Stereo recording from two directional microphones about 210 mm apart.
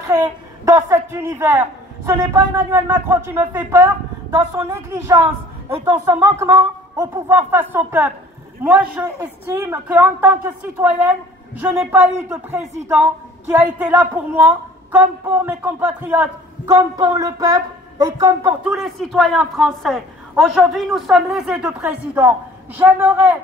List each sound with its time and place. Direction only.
0.7 s a woman's voice: 15° right (ahead or behind)
18.6 s a woman's voice: centre (ahead or behind)